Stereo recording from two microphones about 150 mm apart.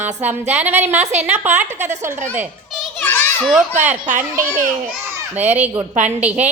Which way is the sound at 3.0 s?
10° left (ahead or behind).